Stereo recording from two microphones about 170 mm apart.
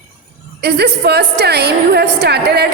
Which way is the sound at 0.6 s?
75° right (ahead or behind).